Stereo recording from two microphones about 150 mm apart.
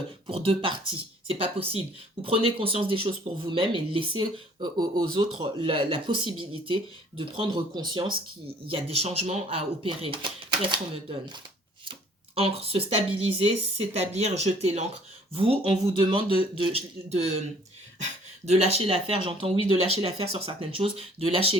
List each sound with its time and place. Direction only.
0.3 s speech: 40° right (ahead or behind)